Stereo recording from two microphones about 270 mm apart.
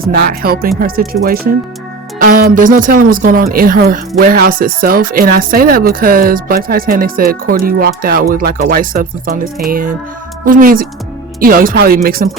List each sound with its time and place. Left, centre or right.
0.1 s speech: right